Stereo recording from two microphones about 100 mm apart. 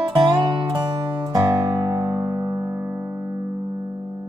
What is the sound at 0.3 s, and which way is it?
Music, 35° right (ahead or behind).